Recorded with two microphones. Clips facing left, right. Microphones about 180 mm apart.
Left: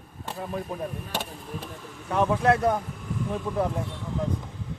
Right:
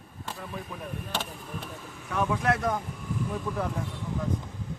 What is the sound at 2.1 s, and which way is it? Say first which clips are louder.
Speech: left 5 dB; 30° left (ahead or behind).